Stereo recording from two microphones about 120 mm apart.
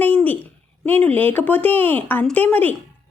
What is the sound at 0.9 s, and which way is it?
A woman's voice, 15° left (ahead or behind).